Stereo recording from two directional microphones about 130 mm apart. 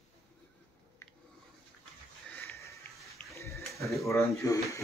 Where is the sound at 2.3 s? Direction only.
20° left (ahead or behind).